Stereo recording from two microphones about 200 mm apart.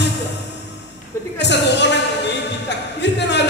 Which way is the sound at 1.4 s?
60° left (ahead or behind).